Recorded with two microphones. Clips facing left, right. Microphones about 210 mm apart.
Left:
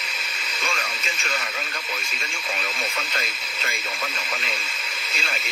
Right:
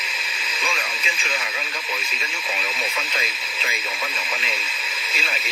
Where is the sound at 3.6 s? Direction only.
Centre (ahead or behind).